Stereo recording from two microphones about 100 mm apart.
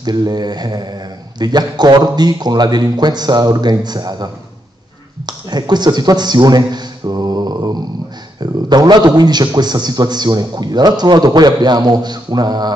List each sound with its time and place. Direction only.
0.0 s a man's voice: 45° right (ahead or behind)